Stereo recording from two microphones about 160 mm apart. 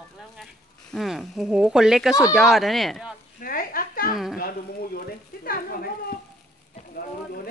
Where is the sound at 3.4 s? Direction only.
60° left (ahead or behind).